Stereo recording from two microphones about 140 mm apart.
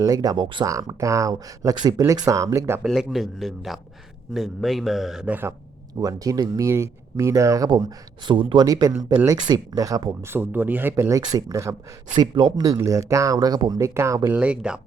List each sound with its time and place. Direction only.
0.0 s speech: 25° right (ahead or behind)
0.7 s speech: 25° right (ahead or behind)
2.8 s a man's voice: centre (ahead or behind)
5.9 s speech: 25° right (ahead or behind)
8.6 s speech: 25° right (ahead or behind)
14.3 s speech: 10° right (ahead or behind)